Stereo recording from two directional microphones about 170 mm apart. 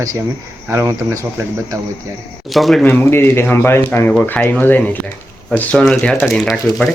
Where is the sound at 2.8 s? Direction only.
15° left (ahead or behind).